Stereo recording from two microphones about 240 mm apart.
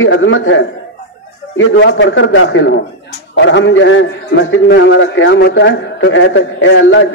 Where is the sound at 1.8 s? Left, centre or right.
Left.